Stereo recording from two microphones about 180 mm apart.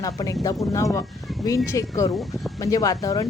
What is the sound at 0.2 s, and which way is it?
A woman's voice, 20° left (ahead or behind).